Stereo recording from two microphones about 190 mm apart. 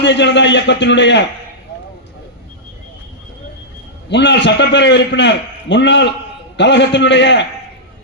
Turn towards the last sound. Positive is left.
turn(degrees=65)  # may be behind; listen again after turning